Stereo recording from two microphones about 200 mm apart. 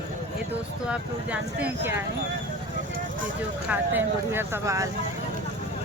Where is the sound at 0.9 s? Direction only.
5° right (ahead or behind).